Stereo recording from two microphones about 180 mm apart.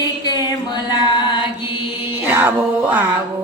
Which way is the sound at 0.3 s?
25° left (ahead or behind).